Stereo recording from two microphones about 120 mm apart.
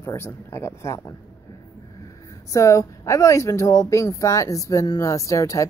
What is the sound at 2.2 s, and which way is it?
Speech, 25° left (ahead or behind).